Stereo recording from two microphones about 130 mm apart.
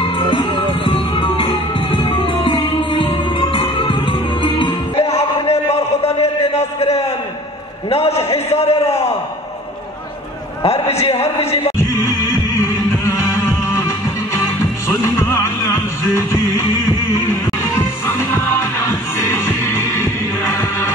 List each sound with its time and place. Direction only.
0.0 s music: 40° left (ahead or behind)
5.8 s a sound: 55° left (ahead or behind)
7.9 s a man's voice: 50° left (ahead or behind)
10.6 s a man's voice: 55° left (ahead or behind)
11.8 s music: 20° left (ahead or behind)